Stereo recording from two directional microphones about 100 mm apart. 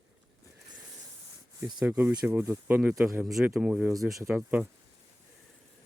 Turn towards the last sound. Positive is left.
turn(degrees=-20)  # may be behind; listen again after turning